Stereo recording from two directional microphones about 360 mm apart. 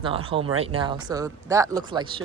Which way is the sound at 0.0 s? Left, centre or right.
Centre.